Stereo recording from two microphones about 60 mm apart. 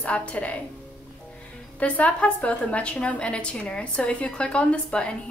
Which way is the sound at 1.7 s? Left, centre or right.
Left.